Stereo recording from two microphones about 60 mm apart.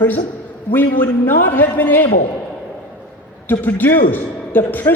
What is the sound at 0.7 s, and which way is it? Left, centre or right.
A man's voice, left.